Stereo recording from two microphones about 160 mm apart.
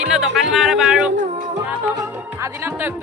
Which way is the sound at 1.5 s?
20° right (ahead or behind).